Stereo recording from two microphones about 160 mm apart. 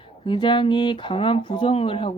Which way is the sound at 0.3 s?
30° left (ahead or behind).